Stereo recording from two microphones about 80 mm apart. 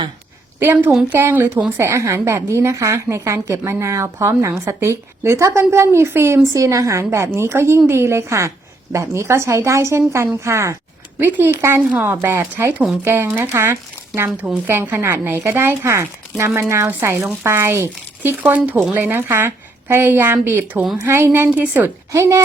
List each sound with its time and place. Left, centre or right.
0.6 s a woman's voice: right
6.5 s a woman's voice: right
11.2 s a woman's voice: right
22.1 s a woman's voice: right